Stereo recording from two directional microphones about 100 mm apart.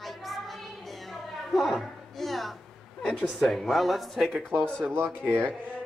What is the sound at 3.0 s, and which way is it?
Speech, centre (ahead or behind).